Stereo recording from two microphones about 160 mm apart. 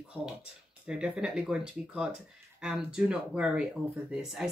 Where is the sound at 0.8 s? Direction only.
5° right (ahead or behind).